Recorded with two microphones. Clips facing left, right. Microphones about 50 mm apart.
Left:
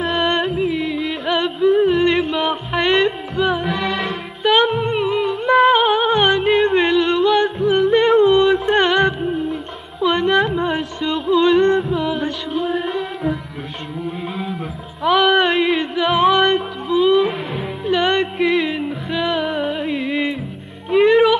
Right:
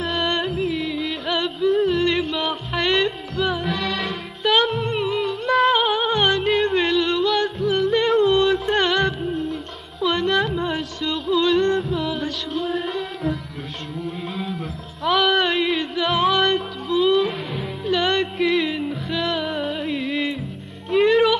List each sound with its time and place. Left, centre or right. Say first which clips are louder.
0.0 s music: left 4 dB; centre
7.4 s yodeling: left 5 dB; centre
8.7 s music: left 4 dB; centre
9.2 s music: left 4 dB; centre
14.0 s a sound: left 3 dB; centre
20.9 s music: left 4 dB; centre